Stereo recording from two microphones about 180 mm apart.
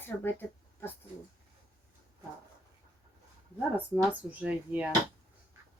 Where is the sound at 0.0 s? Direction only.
10° left (ahead or behind).